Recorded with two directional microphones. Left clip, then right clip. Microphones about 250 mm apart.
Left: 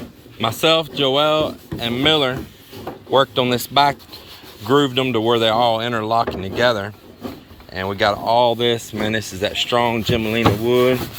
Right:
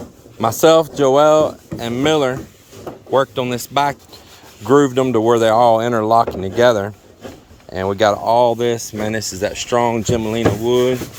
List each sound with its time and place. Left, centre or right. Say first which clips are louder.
0.4 s speech: right 5 dB; right; by 10.9 s centre